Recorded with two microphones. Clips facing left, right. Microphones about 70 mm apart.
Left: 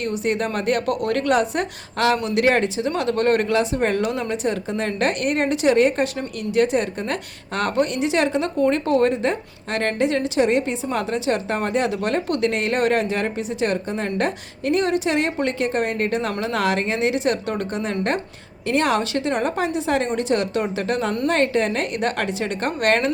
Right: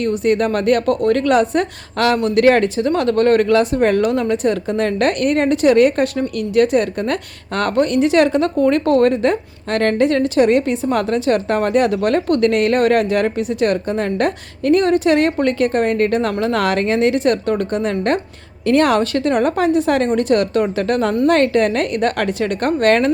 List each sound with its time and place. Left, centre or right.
0.0 s a woman's voice: right
2.4 s a woman's voice: right